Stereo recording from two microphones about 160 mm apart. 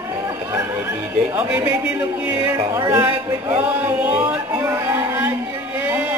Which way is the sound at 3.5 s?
10° right (ahead or behind).